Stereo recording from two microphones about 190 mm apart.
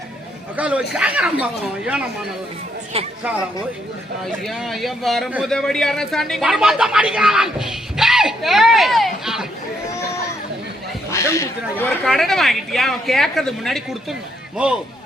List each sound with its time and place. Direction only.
0.5 s speech: 5° right (ahead or behind)
2.9 s speech: 30° right (ahead or behind)
4.4 s speech: centre (ahead or behind)
11.1 s a sound: 15° left (ahead or behind)
11.8 s speech: centre (ahead or behind)